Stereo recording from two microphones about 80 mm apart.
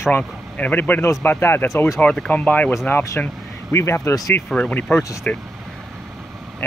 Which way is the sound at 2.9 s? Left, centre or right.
Left.